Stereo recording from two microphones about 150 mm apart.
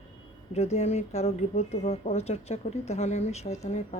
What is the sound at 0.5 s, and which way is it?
Speech, 45° left (ahead or behind).